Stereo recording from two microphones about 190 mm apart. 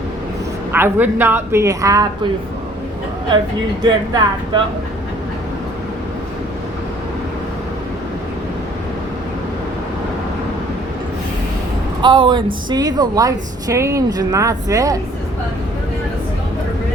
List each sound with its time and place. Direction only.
0.7 s speech: 10° right (ahead or behind)
3.8 s speech: 25° right (ahead or behind)
12.0 s speech: 25° right (ahead or behind)